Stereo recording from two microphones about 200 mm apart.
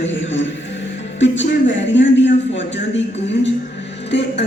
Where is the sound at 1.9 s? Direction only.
65° left (ahead or behind).